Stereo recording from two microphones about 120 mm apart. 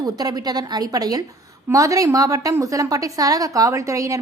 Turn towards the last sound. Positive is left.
turn(degrees=-25)  # may be behind; listen again after turning